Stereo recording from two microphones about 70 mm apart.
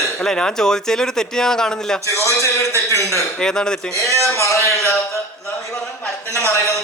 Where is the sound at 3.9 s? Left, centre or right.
Left.